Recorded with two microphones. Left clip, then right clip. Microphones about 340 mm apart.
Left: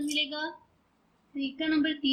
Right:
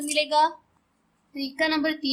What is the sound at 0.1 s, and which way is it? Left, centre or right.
A woman's voice, centre.